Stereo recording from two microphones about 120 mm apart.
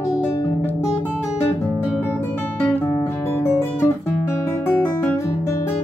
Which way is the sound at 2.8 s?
25° left (ahead or behind).